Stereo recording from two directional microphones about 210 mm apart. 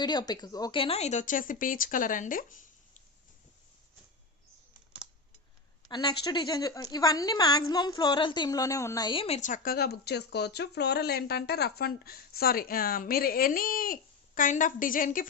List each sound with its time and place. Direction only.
0.0 s speech: 20° left (ahead or behind); by 2.6 s 40° left (ahead or behind)
5.9 s a woman's voice: 20° left (ahead or behind); by 15.3 s 40° left (ahead or behind)